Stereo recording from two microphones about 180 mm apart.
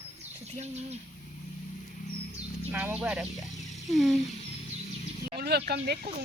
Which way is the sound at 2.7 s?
10° right (ahead or behind).